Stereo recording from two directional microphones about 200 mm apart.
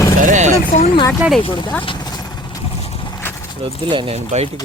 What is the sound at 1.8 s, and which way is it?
Vehicle, 25° left (ahead or behind).